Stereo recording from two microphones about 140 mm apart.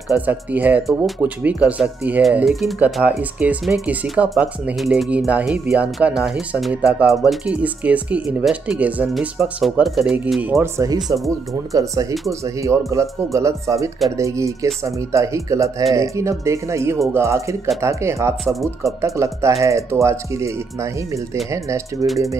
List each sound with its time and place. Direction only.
0.1 s speech: 10° right (ahead or behind)
10.6 s speech: 25° right (ahead or behind)
18.4 s speech: centre (ahead or behind)
18.8 s speech: 20° right (ahead or behind)